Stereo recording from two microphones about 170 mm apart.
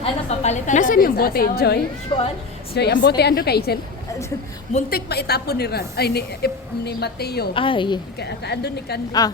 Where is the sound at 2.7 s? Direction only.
80° left.